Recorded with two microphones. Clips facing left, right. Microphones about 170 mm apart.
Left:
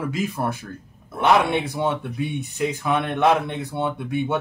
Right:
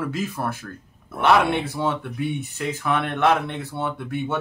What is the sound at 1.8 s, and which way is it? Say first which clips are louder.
Speech: left 1 dB; 15° left (ahead or behind).